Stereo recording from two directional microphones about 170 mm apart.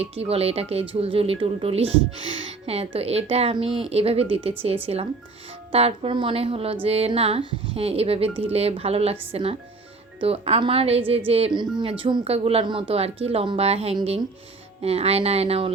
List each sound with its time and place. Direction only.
0.0 s a woman's voice: 35° right (ahead or behind)
5.7 s a woman's voice: 35° right (ahead or behind)